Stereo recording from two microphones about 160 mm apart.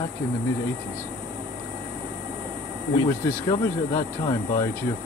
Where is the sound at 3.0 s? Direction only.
20° left (ahead or behind).